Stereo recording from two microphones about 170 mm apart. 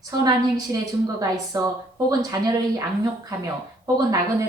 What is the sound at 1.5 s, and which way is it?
Speech, 20° right (ahead or behind).